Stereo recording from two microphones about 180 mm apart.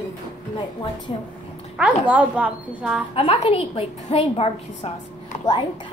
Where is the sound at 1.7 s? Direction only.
5° right (ahead or behind).